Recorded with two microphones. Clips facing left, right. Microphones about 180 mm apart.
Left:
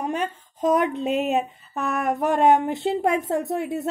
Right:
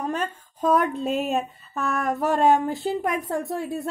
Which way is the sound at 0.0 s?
15° left (ahead or behind).